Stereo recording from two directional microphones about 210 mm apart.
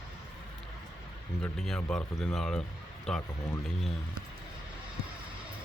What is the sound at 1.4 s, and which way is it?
Speech, 5° left (ahead or behind).